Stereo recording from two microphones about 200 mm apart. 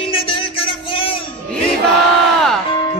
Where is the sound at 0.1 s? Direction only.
25° left (ahead or behind).